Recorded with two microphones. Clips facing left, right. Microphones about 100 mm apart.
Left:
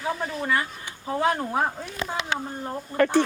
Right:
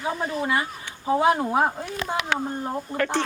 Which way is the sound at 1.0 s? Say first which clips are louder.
Right 4 dB; 15° right (ahead or behind).